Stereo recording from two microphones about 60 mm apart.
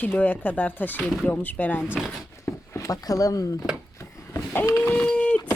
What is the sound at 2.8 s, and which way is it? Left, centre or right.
Speech, left.